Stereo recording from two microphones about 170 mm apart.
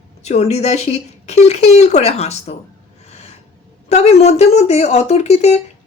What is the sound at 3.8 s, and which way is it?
A woman's voice, 40° left (ahead or behind).